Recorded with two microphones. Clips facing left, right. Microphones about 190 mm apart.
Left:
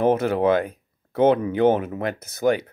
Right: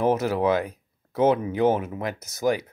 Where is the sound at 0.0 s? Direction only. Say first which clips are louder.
Left 3 dB; 55° left (ahead or behind).